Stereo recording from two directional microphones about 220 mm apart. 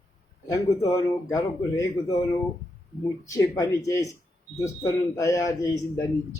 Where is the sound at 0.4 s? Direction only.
15° left (ahead or behind).